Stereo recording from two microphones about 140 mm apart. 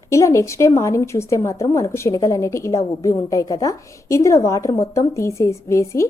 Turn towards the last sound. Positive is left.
turn(degrees=20)  # may be behind; listen again after turning